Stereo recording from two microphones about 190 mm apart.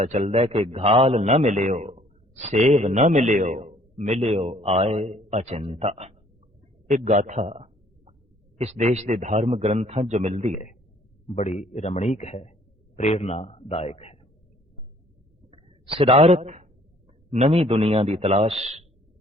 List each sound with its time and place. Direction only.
0.0 s a man's voice: 35° right (ahead or behind)
11.3 s a man's voice: 40° left (ahead or behind)
15.4 s a sound: 30° right (ahead or behind)
17.3 s a man's voice: 35° right (ahead or behind)